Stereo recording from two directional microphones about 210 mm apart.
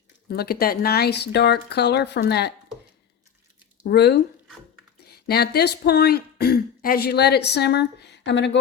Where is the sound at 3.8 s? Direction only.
55° left (ahead or behind).